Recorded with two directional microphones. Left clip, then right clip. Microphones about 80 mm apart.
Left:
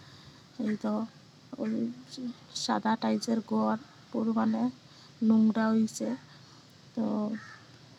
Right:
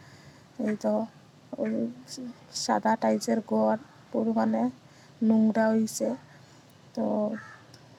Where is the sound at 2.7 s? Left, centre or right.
Centre.